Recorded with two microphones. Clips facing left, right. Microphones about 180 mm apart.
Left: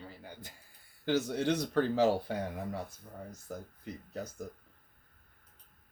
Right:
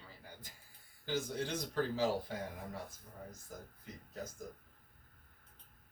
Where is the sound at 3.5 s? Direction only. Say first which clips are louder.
Left 9 dB; 70° left (ahead or behind).